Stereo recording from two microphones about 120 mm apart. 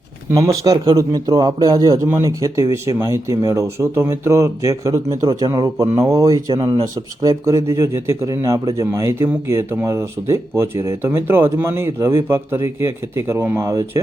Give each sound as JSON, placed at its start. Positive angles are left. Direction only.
{"t": 0.3, "sound": "speech", "side_deg": -30}